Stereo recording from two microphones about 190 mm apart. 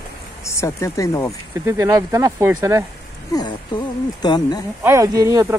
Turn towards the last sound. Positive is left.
turn(degrees=-15)  # may be behind; listen again after turning